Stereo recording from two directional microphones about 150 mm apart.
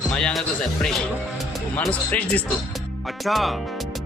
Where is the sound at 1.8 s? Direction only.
10° left (ahead or behind).